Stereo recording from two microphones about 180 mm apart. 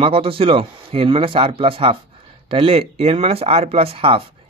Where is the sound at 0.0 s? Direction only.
30° right (ahead or behind).